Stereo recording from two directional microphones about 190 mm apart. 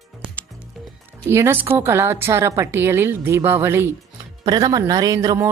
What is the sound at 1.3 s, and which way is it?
Speech, 15° right (ahead or behind).